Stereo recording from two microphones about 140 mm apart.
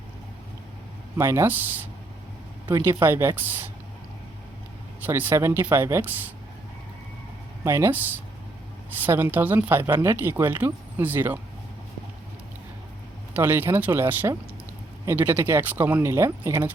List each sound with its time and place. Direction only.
1.1 s speech: 15° right (ahead or behind)
3.0 s speech: 15° right (ahead or behind)
4.9 s speech: 15° right (ahead or behind)
7.6 s speech: 15° right (ahead or behind)
13.3 s speech: 15° right (ahead or behind)